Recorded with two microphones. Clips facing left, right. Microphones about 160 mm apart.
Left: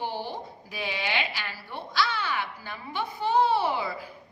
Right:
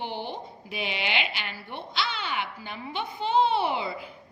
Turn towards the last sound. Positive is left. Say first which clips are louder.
# even
turn(degrees=-20)  # may be behind; listen again after turning